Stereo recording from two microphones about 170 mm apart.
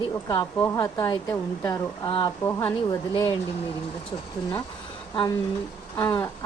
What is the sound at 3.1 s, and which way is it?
Speech, 25° left (ahead or behind).